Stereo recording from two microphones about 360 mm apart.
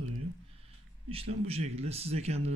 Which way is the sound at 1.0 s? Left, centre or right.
Centre.